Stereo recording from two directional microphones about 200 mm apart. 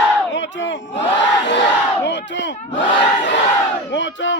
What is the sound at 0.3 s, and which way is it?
Battle cry, 65° left (ahead or behind).